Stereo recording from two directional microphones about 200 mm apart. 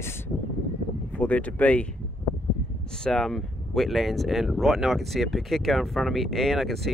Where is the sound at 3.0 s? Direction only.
5° left (ahead or behind).